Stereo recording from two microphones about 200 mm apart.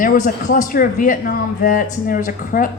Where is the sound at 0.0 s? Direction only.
40° left (ahead or behind).